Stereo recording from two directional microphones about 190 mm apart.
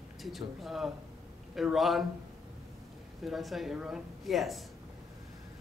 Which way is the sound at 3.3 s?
Centre (ahead or behind).